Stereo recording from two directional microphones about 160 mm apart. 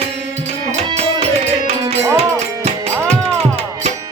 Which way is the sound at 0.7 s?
40° right (ahead or behind).